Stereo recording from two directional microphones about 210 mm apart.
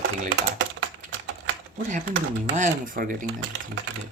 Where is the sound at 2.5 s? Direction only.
35° right (ahead or behind).